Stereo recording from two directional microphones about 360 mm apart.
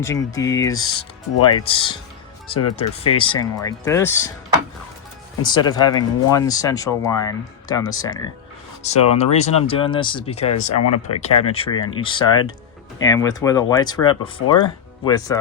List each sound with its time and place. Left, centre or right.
0.0 s speech: centre
5.4 s speech: centre
10.8 s speech: left
11.2 s speech: centre